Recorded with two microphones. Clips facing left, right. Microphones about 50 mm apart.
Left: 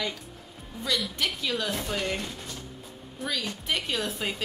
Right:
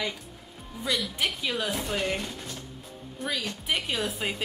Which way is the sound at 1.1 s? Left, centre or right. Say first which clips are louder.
Even; centre.